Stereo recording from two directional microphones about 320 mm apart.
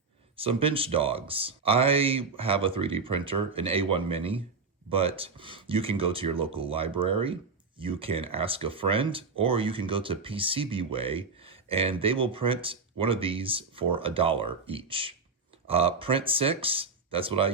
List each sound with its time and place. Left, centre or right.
0.3 s speech: centre